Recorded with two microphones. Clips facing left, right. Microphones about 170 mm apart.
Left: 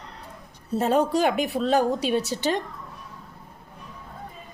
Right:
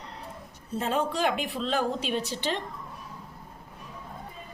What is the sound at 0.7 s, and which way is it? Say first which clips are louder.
A woman's voice: left 7 dB; 40° left (ahead or behind).